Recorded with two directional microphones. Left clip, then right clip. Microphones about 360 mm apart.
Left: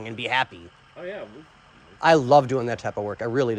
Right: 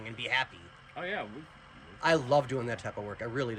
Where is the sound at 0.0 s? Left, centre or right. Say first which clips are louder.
Left 7 dB; centre.